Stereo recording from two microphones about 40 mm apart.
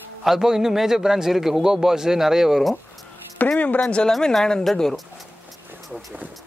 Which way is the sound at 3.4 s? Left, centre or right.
Left.